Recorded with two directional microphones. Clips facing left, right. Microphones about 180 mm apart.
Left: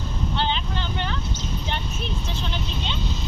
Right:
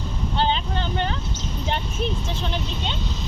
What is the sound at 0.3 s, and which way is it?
Vehicle, 45° right (ahead or behind).